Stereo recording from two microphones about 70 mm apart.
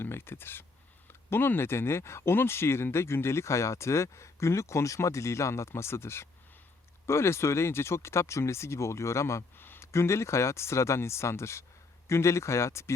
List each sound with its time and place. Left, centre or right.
0.0 s speech: left